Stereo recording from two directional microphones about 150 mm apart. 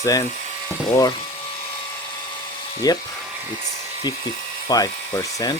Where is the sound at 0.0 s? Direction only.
20° left (ahead or behind).